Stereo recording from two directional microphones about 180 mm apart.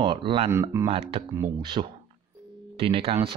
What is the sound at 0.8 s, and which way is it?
Speech, 30° right (ahead or behind).